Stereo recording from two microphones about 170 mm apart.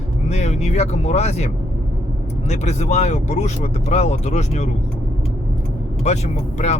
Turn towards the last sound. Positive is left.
turn(degrees=40)  # may be behind; listen again after turning